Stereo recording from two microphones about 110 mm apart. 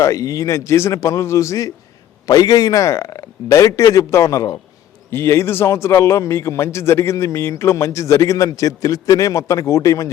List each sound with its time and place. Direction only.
0.0 s a man's voice: 30° left (ahead or behind)